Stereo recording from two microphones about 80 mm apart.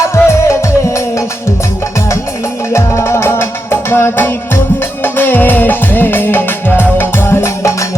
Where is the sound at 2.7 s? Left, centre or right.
Left.